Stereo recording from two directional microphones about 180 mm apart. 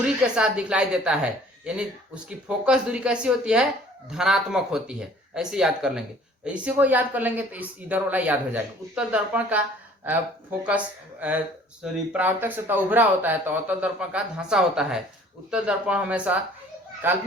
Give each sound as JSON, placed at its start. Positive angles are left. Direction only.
{"t": 0.0, "sound": "a woman's voice", "side_deg": -5}